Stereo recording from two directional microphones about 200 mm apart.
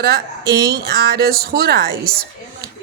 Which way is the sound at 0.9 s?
55° right (ahead or behind).